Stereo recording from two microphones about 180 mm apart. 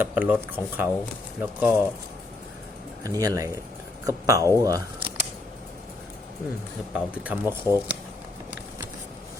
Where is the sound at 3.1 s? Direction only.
20° right (ahead or behind).